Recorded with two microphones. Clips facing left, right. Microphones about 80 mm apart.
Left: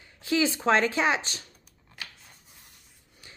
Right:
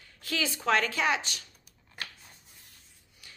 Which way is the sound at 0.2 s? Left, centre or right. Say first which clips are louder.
Left 7 dB; left.